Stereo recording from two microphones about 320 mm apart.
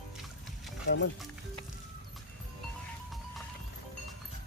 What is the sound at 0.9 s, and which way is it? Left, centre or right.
Speech, left.